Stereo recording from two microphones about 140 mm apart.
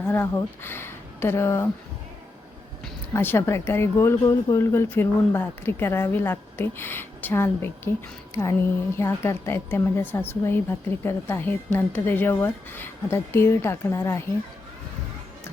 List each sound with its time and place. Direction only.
0.0 s speech: 15° left (ahead or behind)
3.1 s a woman's voice: 15° left (ahead or behind)
9.0 s a woman's voice: 20° left (ahead or behind)